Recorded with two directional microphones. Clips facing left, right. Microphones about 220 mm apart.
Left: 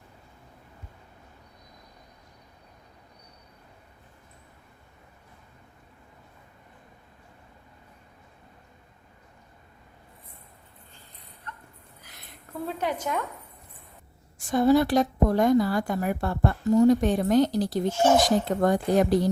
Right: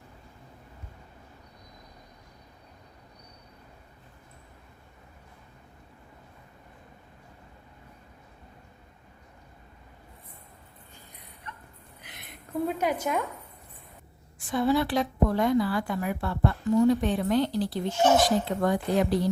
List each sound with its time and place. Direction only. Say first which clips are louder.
12.6 s a woman's voice: right 1 dB; 10° right (ahead or behind)
14.3 s a woman's voice: left 5 dB; 45° left (ahead or behind)